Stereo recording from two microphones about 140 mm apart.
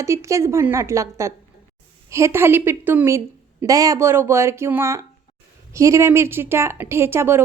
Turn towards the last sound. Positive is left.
turn(degrees=-15)  # may be behind; listen again after turning